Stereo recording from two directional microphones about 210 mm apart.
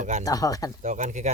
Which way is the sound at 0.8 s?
35° right (ahead or behind).